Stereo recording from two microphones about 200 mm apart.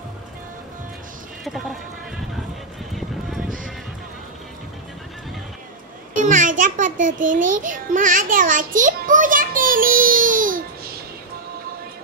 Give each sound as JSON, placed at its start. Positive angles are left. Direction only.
{"t": 1.4, "sound": "music", "side_deg": 0}
{"t": 3.0, "sound": "music", "side_deg": 0}
{"t": 6.1, "sound": "a sound", "side_deg": -40}